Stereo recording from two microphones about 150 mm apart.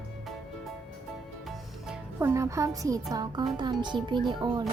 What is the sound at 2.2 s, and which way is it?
A child's voice, 20° right (ahead or behind).